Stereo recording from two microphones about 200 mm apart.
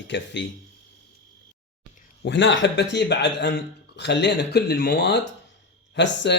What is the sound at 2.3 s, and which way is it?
A man's voice, 60° left (ahead or behind).